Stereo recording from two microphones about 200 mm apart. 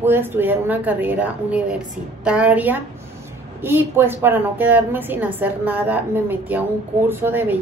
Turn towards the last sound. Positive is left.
turn(degrees=-10)  # may be behind; listen again after turning